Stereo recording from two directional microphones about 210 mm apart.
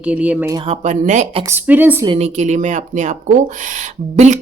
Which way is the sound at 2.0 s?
25° right (ahead or behind).